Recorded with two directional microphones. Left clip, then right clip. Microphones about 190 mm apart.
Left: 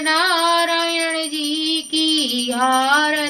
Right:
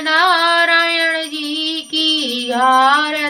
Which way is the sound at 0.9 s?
15° left (ahead or behind).